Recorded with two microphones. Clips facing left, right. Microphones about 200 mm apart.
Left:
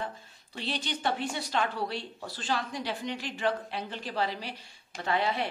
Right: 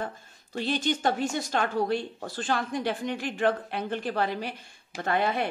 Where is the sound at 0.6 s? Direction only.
45° right (ahead or behind).